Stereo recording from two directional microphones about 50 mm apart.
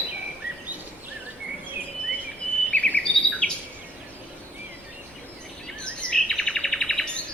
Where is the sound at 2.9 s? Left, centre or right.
Left.